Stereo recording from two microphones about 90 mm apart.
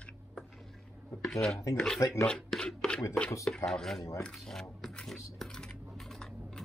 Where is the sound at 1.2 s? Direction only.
5° left (ahead or behind).